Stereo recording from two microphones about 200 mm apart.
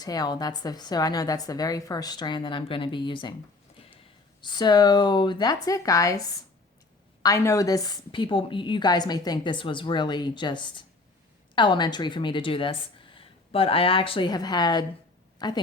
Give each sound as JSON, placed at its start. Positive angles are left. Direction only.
{"t": 0.0, "sound": "a woman's voice", "side_deg": 20}
{"t": 4.4, "sound": "a woman's voice", "side_deg": 20}